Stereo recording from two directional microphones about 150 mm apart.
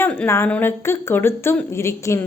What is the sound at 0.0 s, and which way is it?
A woman's voice, 15° left (ahead or behind).